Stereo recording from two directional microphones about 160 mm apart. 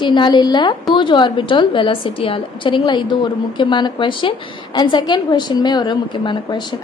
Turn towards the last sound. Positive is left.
turn(degrees=30)  # may be behind; listen again after turning